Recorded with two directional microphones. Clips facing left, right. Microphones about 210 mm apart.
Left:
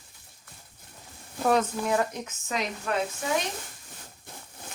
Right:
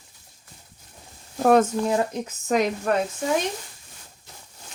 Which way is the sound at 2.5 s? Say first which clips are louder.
Right 10 dB; 50° right (ahead or behind).